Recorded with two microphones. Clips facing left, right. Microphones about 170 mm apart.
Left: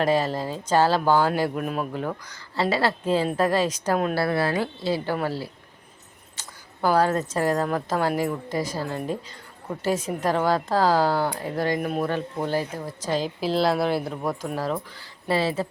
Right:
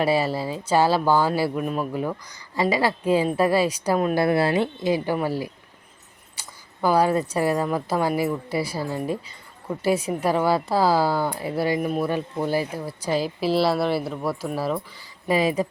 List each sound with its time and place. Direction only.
0.0 s speech: 10° right (ahead or behind)
4.1 s speech: 20° right (ahead or behind)
6.4 s a sound: 10° right (ahead or behind)
6.8 s speech: 10° right (ahead or behind)